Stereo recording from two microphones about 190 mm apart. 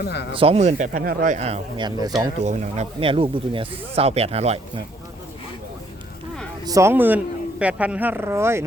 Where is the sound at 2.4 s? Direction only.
35° right (ahead or behind).